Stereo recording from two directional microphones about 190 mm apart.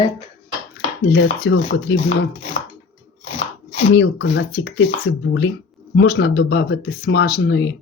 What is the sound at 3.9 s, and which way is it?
Speech, 70° left (ahead or behind).